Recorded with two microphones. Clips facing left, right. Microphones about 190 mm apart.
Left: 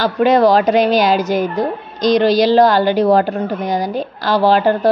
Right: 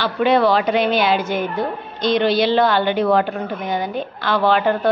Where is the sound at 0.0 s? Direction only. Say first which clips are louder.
Left 4 dB; 40° left (ahead or behind).